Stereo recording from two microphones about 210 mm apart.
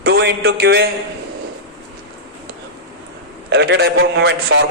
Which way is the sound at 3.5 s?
55° right (ahead or behind).